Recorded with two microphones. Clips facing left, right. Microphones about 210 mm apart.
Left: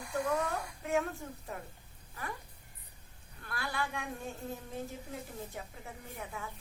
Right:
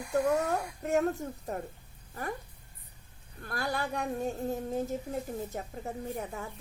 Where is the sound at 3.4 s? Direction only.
40° right (ahead or behind).